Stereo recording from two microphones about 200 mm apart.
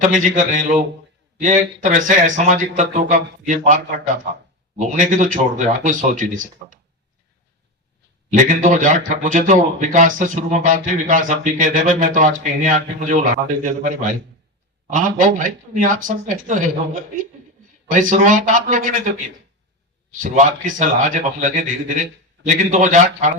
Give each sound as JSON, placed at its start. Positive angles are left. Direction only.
{"t": 0.0, "sound": "a man's voice", "side_deg": -40}
{"t": 8.3, "sound": "a man's voice", "side_deg": -40}
{"t": 14.8, "sound": "a man's voice", "side_deg": -40}
{"t": 20.1, "sound": "a man's voice", "side_deg": -40}